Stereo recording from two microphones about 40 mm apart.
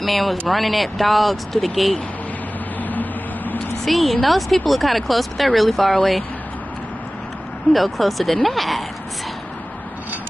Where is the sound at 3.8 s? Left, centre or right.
Centre.